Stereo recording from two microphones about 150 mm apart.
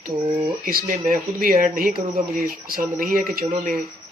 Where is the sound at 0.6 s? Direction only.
70° right (ahead or behind).